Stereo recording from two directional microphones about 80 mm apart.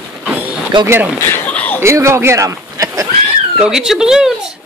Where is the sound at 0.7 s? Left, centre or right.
Right.